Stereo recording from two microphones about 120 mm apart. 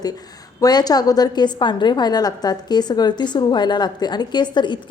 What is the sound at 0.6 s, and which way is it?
A woman's voice, 35° left (ahead or behind).